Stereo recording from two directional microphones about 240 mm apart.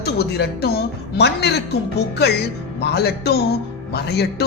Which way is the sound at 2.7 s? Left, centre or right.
Left.